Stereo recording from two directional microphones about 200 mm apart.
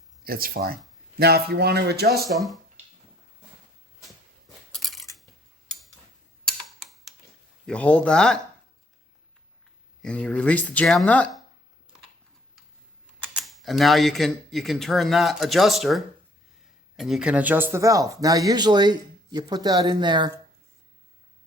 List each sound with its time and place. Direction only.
0.3 s speech: 45° right (ahead or behind)
2.3 s speech: centre (ahead or behind)
4.7 s a sound: centre (ahead or behind)
6.4 s mechanisms: centre (ahead or behind)
7.7 s speech: 5° left (ahead or behind)
10.0 s speech: 5° left (ahead or behind)
13.1 s speech: centre (ahead or behind); by 20.3 s 20° right (ahead or behind)